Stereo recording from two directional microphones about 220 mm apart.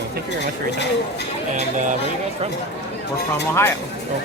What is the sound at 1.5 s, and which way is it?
Speech, 35° right (ahead or behind).